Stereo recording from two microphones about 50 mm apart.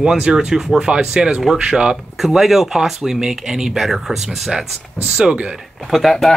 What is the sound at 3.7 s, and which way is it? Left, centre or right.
Speech, centre.